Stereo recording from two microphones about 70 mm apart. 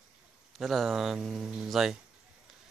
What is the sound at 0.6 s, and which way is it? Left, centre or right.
Speech, centre.